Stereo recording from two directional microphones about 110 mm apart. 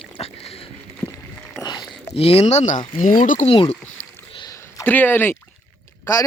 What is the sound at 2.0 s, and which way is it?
Speech, 65° left (ahead or behind).